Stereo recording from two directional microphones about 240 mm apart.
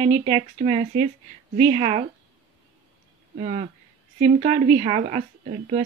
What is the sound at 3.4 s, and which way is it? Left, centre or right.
Speech, right.